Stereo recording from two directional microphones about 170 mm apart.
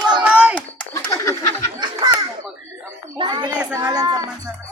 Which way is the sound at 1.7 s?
25° right (ahead or behind).